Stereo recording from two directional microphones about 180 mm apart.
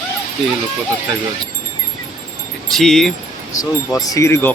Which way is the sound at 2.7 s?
Centre (ahead or behind).